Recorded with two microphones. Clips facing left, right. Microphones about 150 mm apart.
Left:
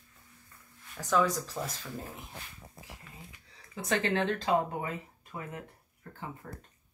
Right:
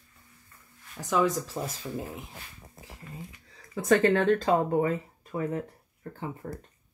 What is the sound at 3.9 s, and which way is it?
Speech, 45° right (ahead or behind).